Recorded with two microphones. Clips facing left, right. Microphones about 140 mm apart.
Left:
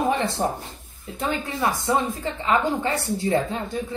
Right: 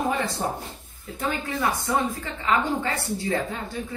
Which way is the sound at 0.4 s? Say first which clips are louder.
Left 3 dB; 55° left (ahead or behind).